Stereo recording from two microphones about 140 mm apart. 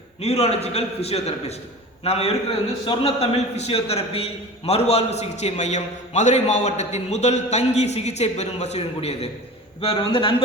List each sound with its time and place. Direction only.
0.2 s a man's voice: 50° left (ahead or behind)